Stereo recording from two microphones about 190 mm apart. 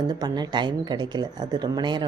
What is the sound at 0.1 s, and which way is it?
A woman's voice, 20° right (ahead or behind).